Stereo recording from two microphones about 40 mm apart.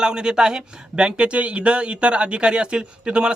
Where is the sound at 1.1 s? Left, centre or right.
Right.